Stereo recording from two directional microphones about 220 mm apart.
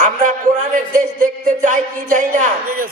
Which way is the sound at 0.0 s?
35° right (ahead or behind).